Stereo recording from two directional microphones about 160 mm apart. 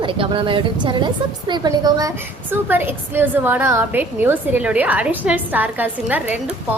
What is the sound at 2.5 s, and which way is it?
A woman's voice, 15° right (ahead or behind).